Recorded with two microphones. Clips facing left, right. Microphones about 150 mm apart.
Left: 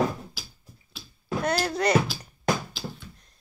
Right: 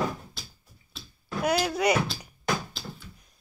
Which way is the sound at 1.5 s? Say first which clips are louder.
Left 2 dB; 5° right (ahead or behind).